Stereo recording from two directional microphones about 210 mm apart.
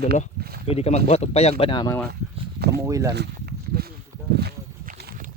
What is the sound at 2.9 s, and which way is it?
Speech, 15° right (ahead or behind).